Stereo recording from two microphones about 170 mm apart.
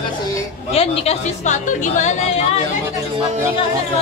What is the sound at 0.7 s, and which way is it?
A woman's voice, 35° left (ahead or behind).